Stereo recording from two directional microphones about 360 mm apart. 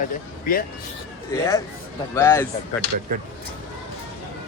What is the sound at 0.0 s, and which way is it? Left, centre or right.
Speech, left.